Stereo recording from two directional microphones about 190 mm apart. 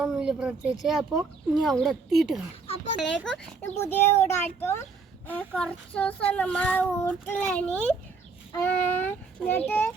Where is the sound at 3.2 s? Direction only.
10° left (ahead or behind).